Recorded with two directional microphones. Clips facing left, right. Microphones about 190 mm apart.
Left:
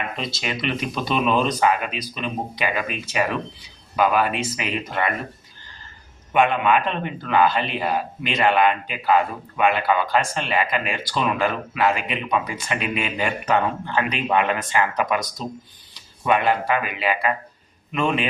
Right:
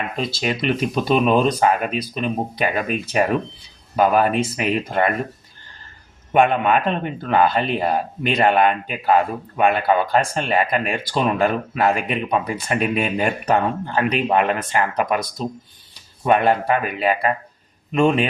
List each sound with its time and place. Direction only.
0.4 s a man's voice: 40° right (ahead or behind)
6.3 s a man's voice: 40° right (ahead or behind)
16.2 s a man's voice: 40° right (ahead or behind)